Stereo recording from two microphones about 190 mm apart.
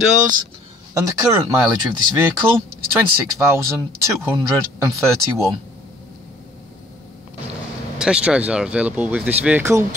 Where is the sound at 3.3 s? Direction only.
15° right (ahead or behind).